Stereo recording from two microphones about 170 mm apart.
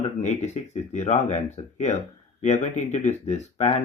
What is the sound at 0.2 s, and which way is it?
Speech, 40° left (ahead or behind).